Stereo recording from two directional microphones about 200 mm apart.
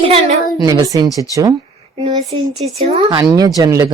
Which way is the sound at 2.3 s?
25° right (ahead or behind).